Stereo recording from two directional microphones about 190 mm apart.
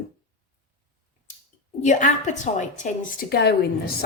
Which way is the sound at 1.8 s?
40° left (ahead or behind).